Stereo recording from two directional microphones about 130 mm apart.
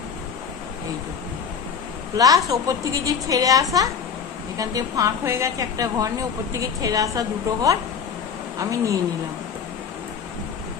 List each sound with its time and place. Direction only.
2.1 s a woman's voice: 25° right (ahead or behind)